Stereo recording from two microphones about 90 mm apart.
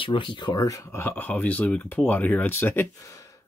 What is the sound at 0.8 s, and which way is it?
Speech, 25° left (ahead or behind).